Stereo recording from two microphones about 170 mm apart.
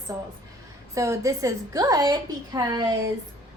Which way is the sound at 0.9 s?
15° right (ahead or behind).